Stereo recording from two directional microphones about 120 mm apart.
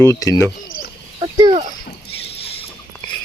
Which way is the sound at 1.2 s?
45° right (ahead or behind).